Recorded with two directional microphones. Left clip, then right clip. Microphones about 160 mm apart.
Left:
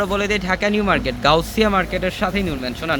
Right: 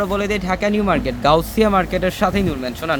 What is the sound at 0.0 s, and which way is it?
Speech, 5° right (ahead or behind).